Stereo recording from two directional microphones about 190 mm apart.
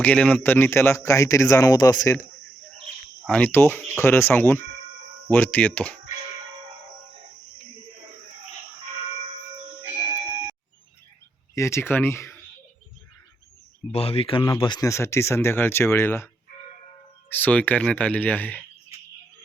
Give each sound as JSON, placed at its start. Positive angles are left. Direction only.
{"t": 0.0, "sound": "speech", "side_deg": 5}
{"t": 3.2, "sound": "speech", "side_deg": 10}
{"t": 11.5, "sound": "speech", "side_deg": 15}
{"t": 13.9, "sound": "speech", "side_deg": 30}